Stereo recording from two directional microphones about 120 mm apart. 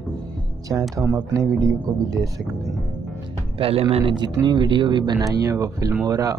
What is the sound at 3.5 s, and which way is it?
Speech, 50° right (ahead or behind).